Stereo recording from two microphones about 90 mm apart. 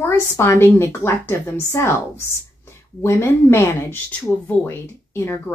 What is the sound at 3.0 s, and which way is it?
Speech, 30° left (ahead or behind).